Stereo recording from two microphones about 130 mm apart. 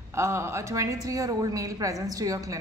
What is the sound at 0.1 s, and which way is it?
A woman's voice, 20° right (ahead or behind).